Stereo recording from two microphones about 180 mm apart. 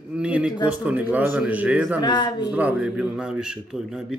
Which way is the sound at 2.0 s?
25° left (ahead or behind).